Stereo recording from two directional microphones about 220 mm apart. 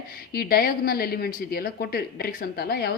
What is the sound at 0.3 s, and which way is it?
A woman's voice, 45° left (ahead or behind).